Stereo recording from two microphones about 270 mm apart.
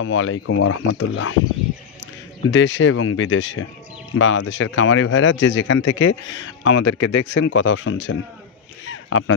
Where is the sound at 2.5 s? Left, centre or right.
Left.